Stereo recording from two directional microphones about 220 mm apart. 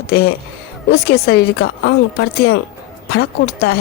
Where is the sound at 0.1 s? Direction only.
45° left (ahead or behind).